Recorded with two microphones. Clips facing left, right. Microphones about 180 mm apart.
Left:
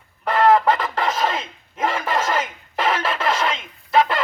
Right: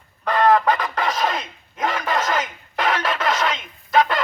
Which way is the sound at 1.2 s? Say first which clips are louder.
Even; 30° left (ahead or behind).